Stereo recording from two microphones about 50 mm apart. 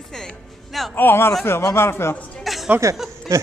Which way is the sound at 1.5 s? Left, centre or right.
Left.